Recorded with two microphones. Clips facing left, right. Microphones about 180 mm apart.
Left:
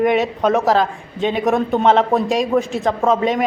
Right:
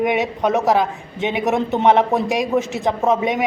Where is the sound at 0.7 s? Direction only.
20° right (ahead or behind).